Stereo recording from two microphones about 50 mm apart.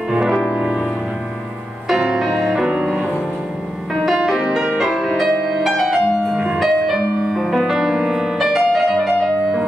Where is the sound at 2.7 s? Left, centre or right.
Right.